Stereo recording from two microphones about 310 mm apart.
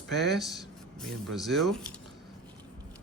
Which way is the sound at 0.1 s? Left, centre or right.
Centre.